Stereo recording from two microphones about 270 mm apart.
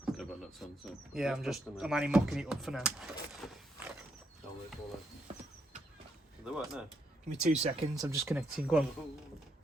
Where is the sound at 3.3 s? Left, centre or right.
Centre.